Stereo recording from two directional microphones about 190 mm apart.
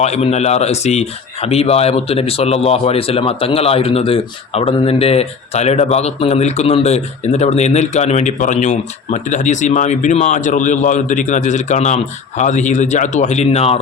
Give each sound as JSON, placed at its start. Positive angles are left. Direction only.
{"t": 0.0, "sound": "speech", "side_deg": 35}